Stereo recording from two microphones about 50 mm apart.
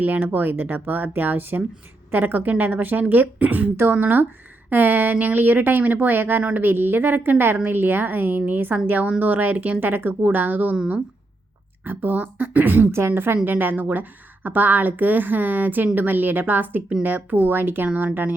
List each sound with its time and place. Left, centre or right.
0.0 s a woman's voice: right
11.9 s a woman's voice: right